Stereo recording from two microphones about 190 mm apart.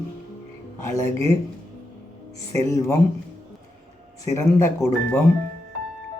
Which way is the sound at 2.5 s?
15° left (ahead or behind).